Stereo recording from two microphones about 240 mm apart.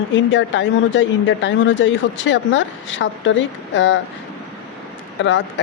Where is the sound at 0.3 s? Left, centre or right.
Left.